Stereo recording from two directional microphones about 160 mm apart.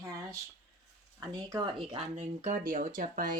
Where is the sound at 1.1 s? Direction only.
25° right (ahead or behind).